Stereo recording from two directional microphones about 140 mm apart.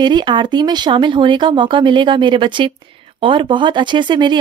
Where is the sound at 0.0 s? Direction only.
30° right (ahead or behind).